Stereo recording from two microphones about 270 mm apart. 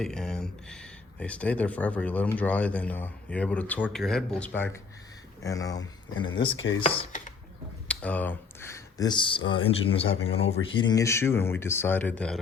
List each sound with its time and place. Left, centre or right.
0.0 s speech: centre; by 7.3 s left
7.9 s speech: centre